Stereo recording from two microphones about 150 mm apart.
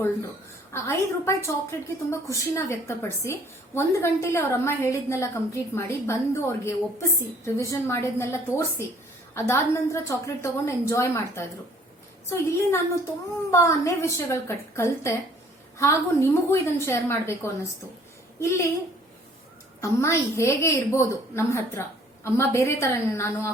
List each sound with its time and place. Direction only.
0.7 s a woman's voice: 20° left (ahead or behind)
19.8 s a woman's voice: 20° left (ahead or behind)